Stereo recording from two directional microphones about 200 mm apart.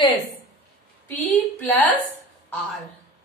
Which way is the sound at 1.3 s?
10° left (ahead or behind).